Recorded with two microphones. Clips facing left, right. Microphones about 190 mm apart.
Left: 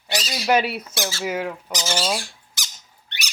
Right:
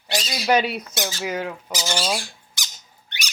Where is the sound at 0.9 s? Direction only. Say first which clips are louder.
Even; 20° right (ahead or behind).